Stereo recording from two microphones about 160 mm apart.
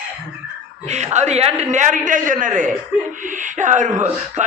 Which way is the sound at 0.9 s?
45° right (ahead or behind).